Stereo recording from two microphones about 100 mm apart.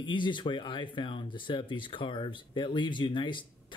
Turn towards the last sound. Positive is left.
turn(degrees=50)  # may be behind; listen again after turning